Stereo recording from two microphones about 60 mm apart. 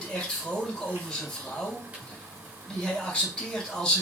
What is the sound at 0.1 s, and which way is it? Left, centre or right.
Speech, centre.